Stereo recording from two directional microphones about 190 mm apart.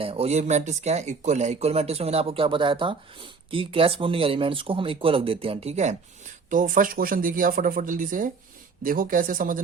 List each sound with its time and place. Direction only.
0.0 s speech: 30° right (ahead or behind)